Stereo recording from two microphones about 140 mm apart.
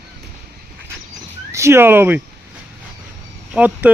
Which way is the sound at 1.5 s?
20° right (ahead or behind).